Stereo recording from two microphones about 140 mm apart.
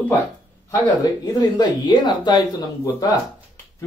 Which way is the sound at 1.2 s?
30° left (ahead or behind).